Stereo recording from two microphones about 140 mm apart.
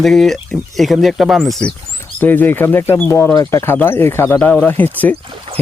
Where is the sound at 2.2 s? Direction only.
15° left (ahead or behind).